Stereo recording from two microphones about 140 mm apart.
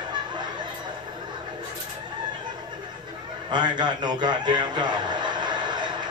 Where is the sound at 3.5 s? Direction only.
30° right (ahead or behind).